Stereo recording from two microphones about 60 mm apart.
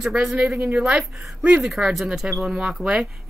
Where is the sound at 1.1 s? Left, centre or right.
Centre.